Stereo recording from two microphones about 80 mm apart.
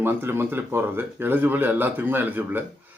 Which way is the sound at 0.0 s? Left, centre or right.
Right.